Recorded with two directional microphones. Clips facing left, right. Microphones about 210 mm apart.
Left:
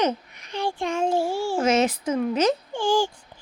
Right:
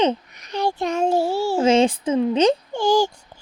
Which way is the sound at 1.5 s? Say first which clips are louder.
Right 5 dB; 30° right (ahead or behind).